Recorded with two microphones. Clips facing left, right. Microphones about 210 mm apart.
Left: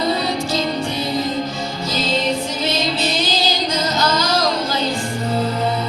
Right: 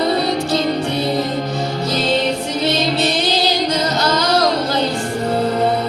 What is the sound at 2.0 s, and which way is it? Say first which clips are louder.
Music: right 1 dB; 65° right (ahead or behind).